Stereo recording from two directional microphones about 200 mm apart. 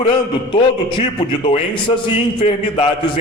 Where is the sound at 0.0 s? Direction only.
25° left (ahead or behind).